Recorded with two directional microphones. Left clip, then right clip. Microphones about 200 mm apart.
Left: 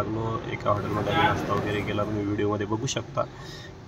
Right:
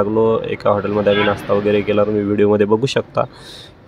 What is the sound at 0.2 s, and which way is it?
Speech, 40° right (ahead or behind).